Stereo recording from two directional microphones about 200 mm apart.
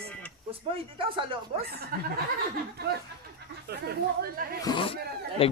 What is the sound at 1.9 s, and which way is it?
Speech, 50° right (ahead or behind).